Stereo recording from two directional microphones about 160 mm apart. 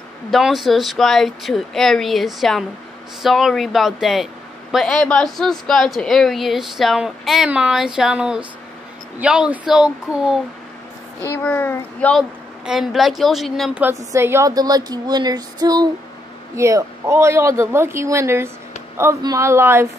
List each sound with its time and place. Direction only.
0.3 s a woman's voice: centre (ahead or behind)
11.2 s a child's voice: 15° left (ahead or behind)
12.2 s a woman's voice: 5° right (ahead or behind)
13.8 s a woman's voice: 15° right (ahead or behind)